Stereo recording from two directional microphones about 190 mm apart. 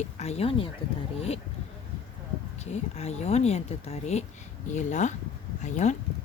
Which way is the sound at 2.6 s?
35° left (ahead or behind).